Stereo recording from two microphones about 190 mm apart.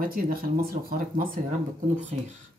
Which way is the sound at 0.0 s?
50° right (ahead or behind).